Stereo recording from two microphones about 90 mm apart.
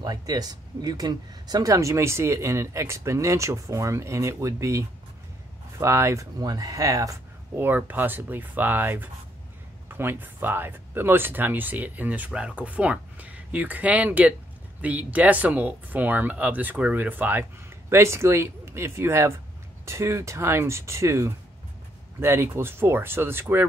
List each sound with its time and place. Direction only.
0.0 s speech: 45° right (ahead or behind)
7.5 s speech: 25° right (ahead or behind)